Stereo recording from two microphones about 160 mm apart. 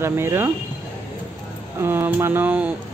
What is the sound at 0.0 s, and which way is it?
Speech, 15° right (ahead or behind).